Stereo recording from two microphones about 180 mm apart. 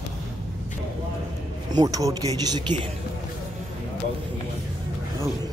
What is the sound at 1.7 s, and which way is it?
Speech, 20° right (ahead or behind).